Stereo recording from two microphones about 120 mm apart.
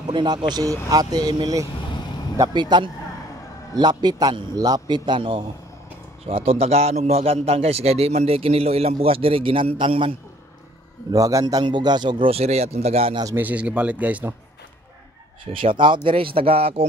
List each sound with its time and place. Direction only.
0.0 s a man's voice: 40° right (ahead or behind)
6.2 s a man's voice: 55° right (ahead or behind)
11.1 s a man's voice: 30° right (ahead or behind); by 13.1 s 60° right (ahead or behind)
13.1 s a man's voice: 30° right (ahead or behind)
13.4 s speech: 10° right (ahead or behind)
15.5 s speech: 45° right (ahead or behind)